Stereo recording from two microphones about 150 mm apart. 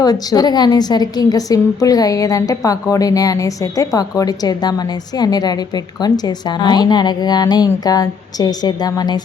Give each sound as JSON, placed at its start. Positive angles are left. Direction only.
{"t": 0.0, "sound": "a woman's voice", "side_deg": 25}